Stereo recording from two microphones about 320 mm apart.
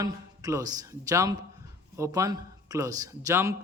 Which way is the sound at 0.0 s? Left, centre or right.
Centre.